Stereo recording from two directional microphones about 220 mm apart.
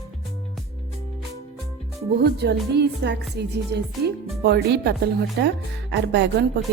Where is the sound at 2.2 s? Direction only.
50° right (ahead or behind).